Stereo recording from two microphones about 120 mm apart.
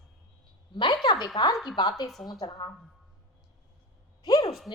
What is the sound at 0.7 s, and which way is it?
Speech, 40° left (ahead or behind).